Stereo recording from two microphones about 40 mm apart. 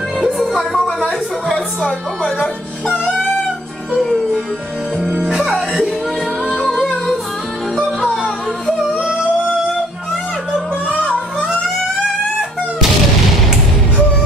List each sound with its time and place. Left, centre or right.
0.2 s music: centre
5.4 s music: centre
6.5 s music: centre
8.8 s a sound: right